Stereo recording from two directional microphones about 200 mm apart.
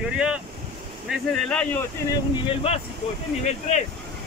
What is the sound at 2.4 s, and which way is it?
Speech, 30° left (ahead or behind).